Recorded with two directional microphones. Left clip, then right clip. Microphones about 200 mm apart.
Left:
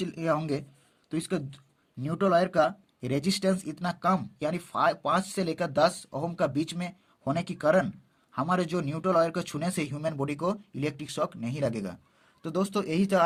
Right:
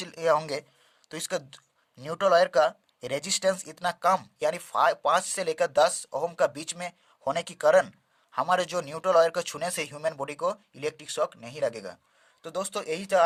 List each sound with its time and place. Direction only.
0.0 s speech: 30° right (ahead or behind); by 13.2 s 15° right (ahead or behind)